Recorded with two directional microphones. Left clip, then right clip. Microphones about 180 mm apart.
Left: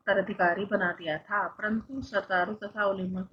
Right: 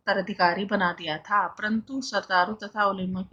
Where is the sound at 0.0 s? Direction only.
50° right (ahead or behind).